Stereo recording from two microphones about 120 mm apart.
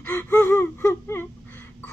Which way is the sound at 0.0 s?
15° left (ahead or behind).